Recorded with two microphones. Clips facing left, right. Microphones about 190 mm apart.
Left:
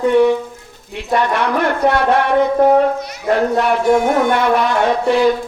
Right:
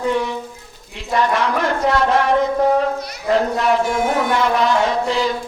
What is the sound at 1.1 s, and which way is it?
Speech, 60° left (ahead or behind).